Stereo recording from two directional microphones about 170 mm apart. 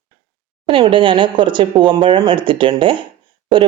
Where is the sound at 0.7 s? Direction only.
30° right (ahead or behind).